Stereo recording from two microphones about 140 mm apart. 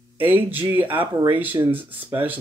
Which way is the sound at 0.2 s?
15° right (ahead or behind).